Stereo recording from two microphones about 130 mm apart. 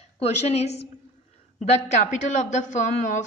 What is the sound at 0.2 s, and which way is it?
A woman's voice, 55° left (ahead or behind).